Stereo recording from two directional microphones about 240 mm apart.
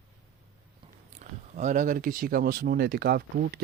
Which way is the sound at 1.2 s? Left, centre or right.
Right.